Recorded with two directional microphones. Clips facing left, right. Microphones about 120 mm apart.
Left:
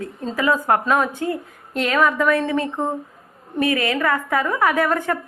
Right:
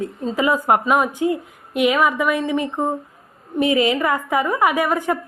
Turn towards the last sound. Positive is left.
turn(degrees=-15)  # may be behind; listen again after turning